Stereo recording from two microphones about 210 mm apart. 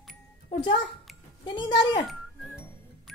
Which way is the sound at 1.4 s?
20° left (ahead or behind).